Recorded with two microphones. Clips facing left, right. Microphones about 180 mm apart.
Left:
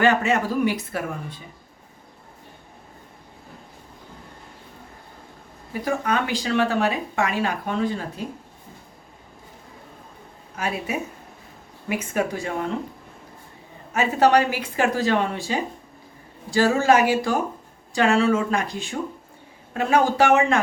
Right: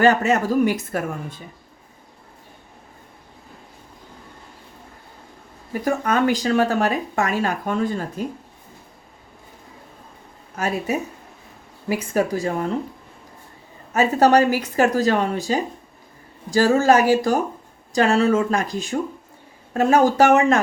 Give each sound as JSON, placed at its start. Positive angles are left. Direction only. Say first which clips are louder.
{"t": 0.0, "sound": "speech", "louder": "right 3 dB", "side_deg": -40}
{"t": 5.8, "sound": "speech", "louder": "right 4 dB", "side_deg": -45}
{"t": 10.6, "sound": "speech", "louder": "right 4 dB", "side_deg": -40}
{"t": 13.9, "sound": "speech", "louder": "right 3 dB", "side_deg": -40}